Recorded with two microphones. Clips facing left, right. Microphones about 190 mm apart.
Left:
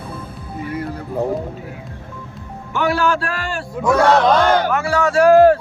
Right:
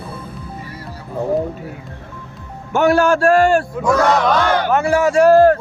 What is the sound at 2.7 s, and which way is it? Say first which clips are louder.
Speech: right 5 dB; 45° right (ahead or behind).